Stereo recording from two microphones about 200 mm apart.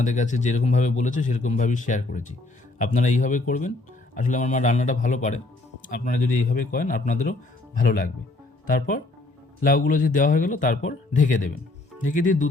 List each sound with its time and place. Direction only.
0.0 s a man's voice: 35° left (ahead or behind)